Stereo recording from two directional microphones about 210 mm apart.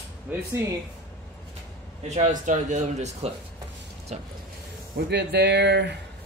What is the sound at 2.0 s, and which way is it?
Speech, 35° right (ahead or behind).